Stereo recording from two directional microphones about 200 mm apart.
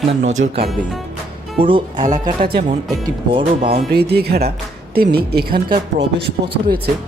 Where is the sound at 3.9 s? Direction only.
55° right (ahead or behind).